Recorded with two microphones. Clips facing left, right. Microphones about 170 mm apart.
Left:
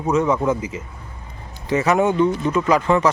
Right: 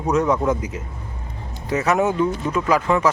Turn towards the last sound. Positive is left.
turn(degrees=-5)  # may be behind; listen again after turning